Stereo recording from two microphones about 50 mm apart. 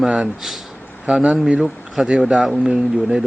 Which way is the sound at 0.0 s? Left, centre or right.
Centre.